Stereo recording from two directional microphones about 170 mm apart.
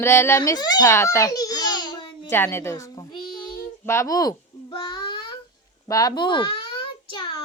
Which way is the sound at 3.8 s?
15° left (ahead or behind).